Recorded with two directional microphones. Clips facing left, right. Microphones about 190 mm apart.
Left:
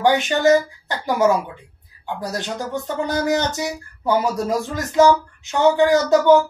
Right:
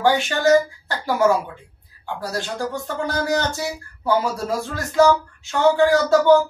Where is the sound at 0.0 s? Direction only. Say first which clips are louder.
Left 2 dB; 20° left (ahead or behind).